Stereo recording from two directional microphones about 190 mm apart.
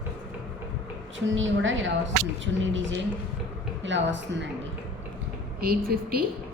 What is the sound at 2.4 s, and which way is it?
A woman's voice, 75° right (ahead or behind).